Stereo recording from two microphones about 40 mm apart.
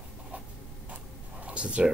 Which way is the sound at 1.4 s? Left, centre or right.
Right.